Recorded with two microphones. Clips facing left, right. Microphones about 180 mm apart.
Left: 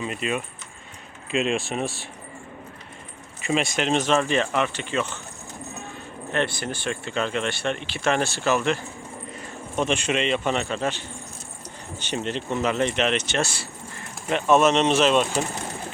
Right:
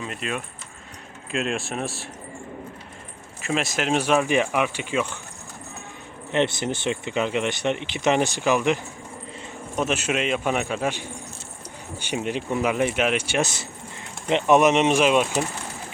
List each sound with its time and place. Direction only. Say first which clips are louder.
0.0 s speech: left 3 dB; centre (ahead or behind)
3.4 s speech: left 1 dB; centre (ahead or behind)
6.3 s speech: right 3 dB; 20° right (ahead or behind)